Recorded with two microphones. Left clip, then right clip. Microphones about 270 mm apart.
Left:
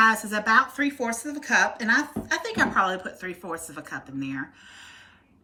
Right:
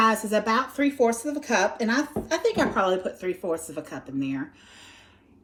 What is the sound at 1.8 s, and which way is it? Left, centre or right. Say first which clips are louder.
Speech: left 3 dB; right.